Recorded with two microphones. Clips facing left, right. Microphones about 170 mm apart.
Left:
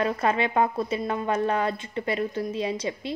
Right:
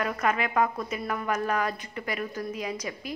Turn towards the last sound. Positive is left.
turn(degrees=30)  # may be behind; listen again after turning